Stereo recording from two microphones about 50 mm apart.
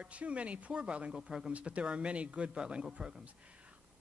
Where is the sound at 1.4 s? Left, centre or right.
Right.